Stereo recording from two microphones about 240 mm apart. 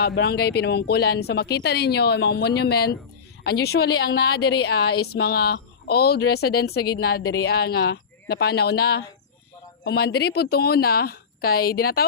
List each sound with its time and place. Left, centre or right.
0.0 s a woman's voice: left